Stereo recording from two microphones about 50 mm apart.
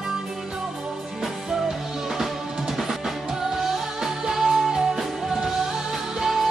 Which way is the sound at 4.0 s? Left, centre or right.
Centre.